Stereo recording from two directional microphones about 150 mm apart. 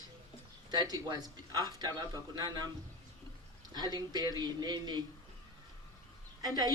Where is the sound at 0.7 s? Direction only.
25° right (ahead or behind).